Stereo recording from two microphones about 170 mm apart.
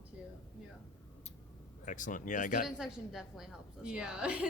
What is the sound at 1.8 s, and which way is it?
Speech, 50° left (ahead or behind).